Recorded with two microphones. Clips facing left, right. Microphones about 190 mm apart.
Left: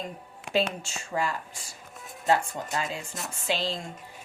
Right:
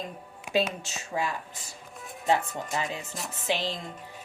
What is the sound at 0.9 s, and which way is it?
A woman's voice, 15° right (ahead or behind).